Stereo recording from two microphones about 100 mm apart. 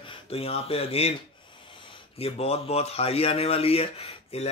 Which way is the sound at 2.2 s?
90° left.